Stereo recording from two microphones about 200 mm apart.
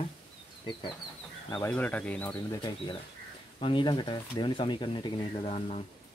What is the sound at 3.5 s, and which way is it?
Speech, 25° left (ahead or behind).